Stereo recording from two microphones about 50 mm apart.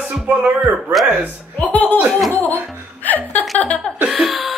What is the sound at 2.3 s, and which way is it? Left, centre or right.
Music, left.